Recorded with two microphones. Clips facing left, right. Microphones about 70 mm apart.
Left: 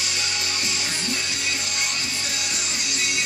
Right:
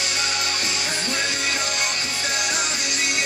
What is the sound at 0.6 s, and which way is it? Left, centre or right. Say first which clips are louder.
Music: right 2 dB; right.